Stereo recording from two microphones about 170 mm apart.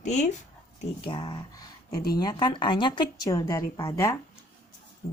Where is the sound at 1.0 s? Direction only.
30° left (ahead or behind).